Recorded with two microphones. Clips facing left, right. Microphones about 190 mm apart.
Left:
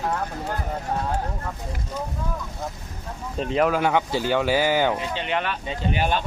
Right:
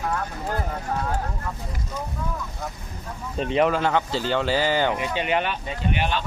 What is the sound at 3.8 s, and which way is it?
Speech, 15° left (ahead or behind).